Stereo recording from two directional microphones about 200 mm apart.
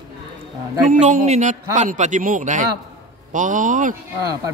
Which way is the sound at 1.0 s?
35° right (ahead or behind).